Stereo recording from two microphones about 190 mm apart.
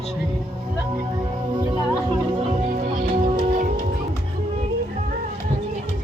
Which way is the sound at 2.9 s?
50° right (ahead or behind).